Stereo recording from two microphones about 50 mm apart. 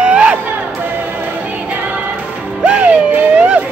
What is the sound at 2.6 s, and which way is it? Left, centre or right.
Music, right.